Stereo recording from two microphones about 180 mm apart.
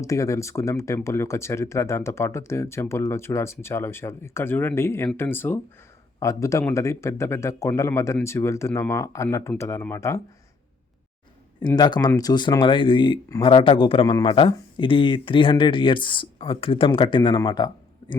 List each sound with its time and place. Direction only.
0.0 s speech: 15° left (ahead or behind)
11.6 s speech: 25° left (ahead or behind)